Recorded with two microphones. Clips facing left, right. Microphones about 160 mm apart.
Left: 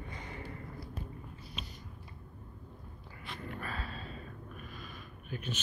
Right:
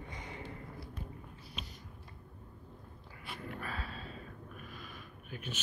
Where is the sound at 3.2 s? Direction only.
5° right (ahead or behind).